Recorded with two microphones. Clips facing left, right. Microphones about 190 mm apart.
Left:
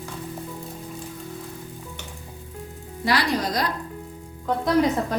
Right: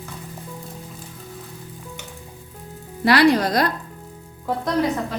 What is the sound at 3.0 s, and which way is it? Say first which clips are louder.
Speech: right 8 dB; 65° right (ahead or behind).